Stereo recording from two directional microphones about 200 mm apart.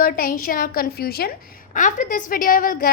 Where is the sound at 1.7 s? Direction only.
40° left (ahead or behind).